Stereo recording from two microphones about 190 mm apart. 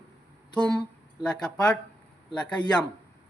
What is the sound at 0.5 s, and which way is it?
Speech, 5° left (ahead or behind).